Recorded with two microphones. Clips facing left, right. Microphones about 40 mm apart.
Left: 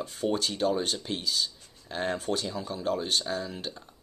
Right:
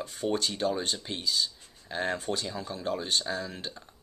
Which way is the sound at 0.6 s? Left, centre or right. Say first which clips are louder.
Left 3 dB; centre.